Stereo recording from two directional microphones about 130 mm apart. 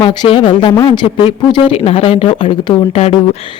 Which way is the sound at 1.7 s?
50° left (ahead or behind).